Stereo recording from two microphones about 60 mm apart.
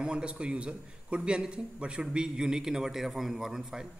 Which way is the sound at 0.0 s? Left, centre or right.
Centre.